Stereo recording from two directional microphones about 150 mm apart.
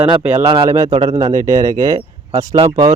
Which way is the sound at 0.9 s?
40° right (ahead or behind).